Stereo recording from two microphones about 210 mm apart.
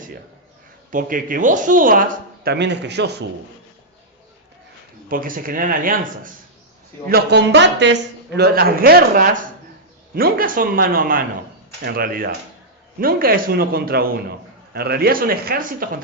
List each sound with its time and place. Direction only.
0.9 s speech: 40° right (ahead or behind)
5.0 s speech: 40° right (ahead or behind)
7.1 s a man's voice: 50° right (ahead or behind)